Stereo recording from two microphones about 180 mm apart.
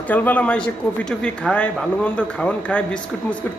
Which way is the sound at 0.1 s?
10° left (ahead or behind).